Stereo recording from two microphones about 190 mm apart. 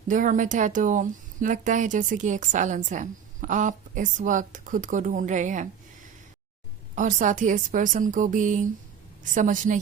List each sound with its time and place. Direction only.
0.1 s speech: 40° right (ahead or behind)
6.9 s a woman's voice: 40° right (ahead or behind)